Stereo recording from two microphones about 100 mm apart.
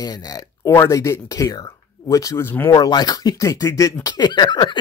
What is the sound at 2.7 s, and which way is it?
Speech, 45° left (ahead or behind).